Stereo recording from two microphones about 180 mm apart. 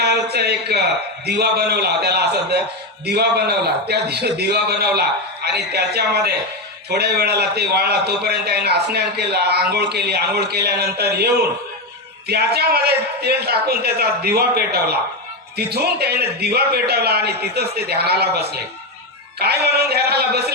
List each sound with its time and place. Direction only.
0.0 s a man's voice: 65° right (ahead or behind)